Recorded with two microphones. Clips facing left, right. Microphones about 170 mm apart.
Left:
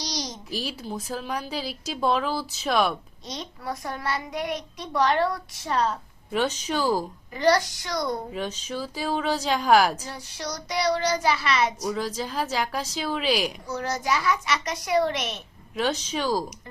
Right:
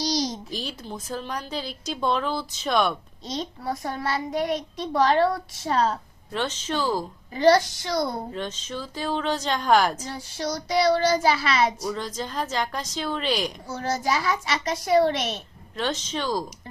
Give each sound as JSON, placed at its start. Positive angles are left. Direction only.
{"t": 0.0, "sound": "a sound", "side_deg": -30}
{"t": 0.5, "sound": "a woman's voice", "side_deg": 10}
{"t": 3.2, "sound": "child singing", "side_deg": -30}
{"t": 6.3, "sound": "a woman's voice", "side_deg": 10}
{"t": 7.3, "sound": "child singing", "side_deg": -25}
{"t": 8.3, "sound": "a woman's voice", "side_deg": 10}
{"t": 10.1, "sound": "child singing", "side_deg": -30}
{"t": 11.9, "sound": "a woman's voice", "side_deg": 5}
{"t": 13.7, "sound": "child singing", "side_deg": -30}
{"t": 15.7, "sound": "a woman's voice", "side_deg": 10}